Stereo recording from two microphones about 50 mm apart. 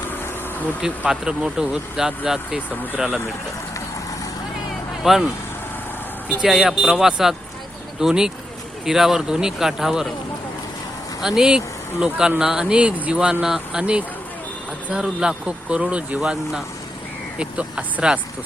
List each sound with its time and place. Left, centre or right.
0.8 s speech: centre
5.0 s speech: centre
6.5 s speech: centre
11.2 s speech: centre
13.4 s speech: centre
14.9 s speech: centre
16.3 s speech: centre
17.3 s speech: right